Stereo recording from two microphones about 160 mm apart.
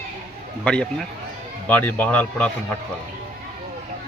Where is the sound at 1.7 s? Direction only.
10° left (ahead or behind).